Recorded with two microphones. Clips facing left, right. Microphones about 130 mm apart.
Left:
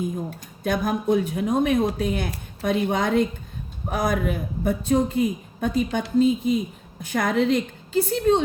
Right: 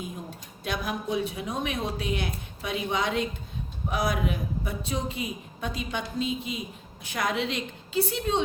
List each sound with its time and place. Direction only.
0.6 s speech: 45° left (ahead or behind)